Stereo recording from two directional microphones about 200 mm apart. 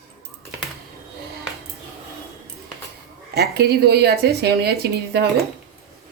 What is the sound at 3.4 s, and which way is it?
A woman's voice, 55° right (ahead or behind).